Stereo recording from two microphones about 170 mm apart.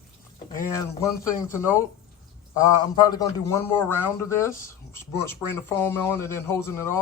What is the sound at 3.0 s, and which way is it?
A man's voice, 20° left (ahead or behind).